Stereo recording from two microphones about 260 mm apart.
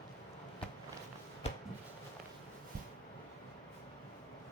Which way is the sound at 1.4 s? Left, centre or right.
Left.